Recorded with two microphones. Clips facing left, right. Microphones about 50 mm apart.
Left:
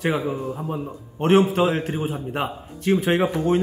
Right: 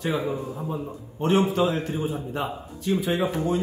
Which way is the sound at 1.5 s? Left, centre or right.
Left.